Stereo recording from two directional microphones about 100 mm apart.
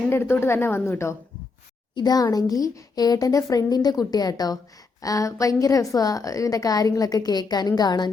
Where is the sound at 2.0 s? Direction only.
40° left (ahead or behind).